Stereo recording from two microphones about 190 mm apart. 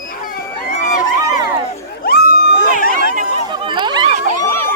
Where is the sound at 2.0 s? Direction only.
55° left (ahead or behind).